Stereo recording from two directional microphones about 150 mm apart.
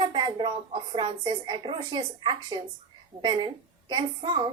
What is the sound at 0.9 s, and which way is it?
A woman's voice, 30° right (ahead or behind).